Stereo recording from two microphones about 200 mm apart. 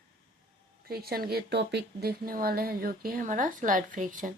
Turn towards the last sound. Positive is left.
turn(degrees=-40)  # may be behind; listen again after turning